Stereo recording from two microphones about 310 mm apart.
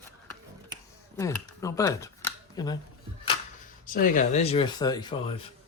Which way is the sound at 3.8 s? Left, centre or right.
Left.